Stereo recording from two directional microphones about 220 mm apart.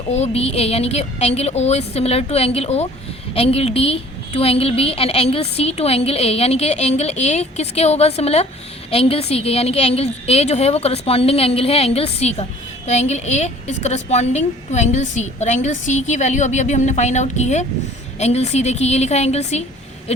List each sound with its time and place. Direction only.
0.1 s a woman's voice: 30° left (ahead or behind)